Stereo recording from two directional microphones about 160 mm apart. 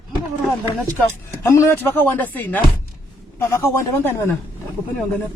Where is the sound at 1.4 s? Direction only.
20° left (ahead or behind).